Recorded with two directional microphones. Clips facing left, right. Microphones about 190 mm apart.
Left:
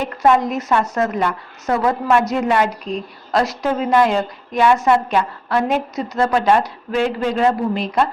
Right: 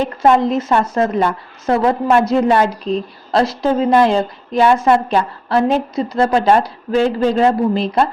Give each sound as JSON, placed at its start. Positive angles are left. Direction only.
{"t": 0.0, "sound": "a woman's voice", "side_deg": -30}